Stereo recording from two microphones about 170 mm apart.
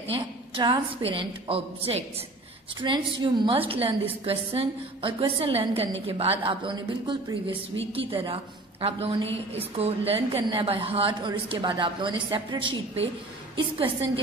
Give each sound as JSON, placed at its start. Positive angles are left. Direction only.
{"t": 0.1, "sound": "a woman's voice", "side_deg": -30}
{"t": 9.5, "sound": "a woman's voice", "side_deg": -35}